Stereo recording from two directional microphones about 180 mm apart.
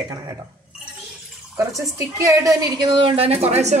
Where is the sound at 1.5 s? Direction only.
15° right (ahead or behind).